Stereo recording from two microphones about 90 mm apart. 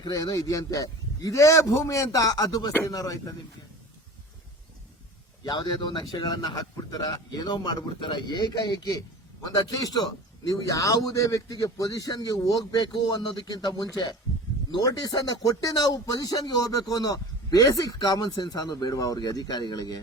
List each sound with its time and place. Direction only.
0.0 s a man's voice: 50° left (ahead or behind)
5.4 s a man's voice: 55° left (ahead or behind)